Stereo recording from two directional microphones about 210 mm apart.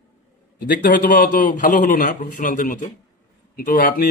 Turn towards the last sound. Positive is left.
turn(degrees=45)  # may be behind; listen again after turning